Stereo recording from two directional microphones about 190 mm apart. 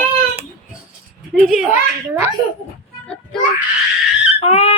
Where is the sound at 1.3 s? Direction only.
Centre (ahead or behind).